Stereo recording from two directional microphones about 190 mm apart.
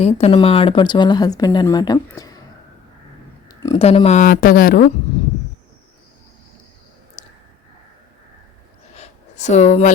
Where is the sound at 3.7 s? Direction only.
30° left (ahead or behind); by 4.8 s 50° left (ahead or behind).